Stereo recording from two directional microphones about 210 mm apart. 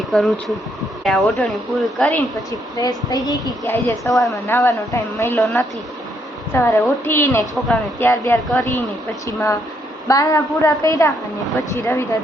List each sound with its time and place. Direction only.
0.1 s a woman's voice: centre (ahead or behind)